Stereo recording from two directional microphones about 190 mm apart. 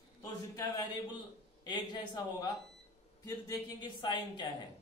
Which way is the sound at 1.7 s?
20° left (ahead or behind).